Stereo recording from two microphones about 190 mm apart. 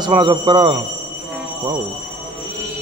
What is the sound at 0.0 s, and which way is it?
Speech, 25° right (ahead or behind).